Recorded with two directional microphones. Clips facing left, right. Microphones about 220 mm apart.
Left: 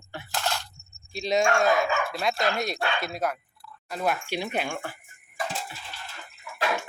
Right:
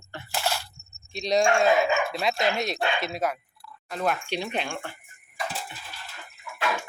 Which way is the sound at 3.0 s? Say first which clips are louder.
Right 1 dB; centre (ahead or behind).